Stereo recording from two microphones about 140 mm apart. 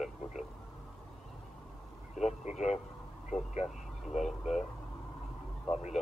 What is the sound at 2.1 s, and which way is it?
Speech, 5° right (ahead or behind).